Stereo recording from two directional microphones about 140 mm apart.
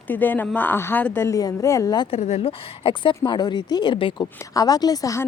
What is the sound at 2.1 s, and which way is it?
Speech, 45° left (ahead or behind).